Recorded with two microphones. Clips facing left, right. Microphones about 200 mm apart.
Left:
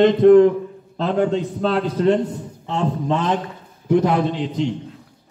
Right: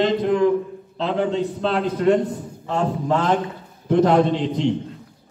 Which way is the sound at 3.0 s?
20° left (ahead or behind).